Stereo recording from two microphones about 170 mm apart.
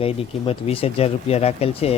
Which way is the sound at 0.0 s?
35° left (ahead or behind).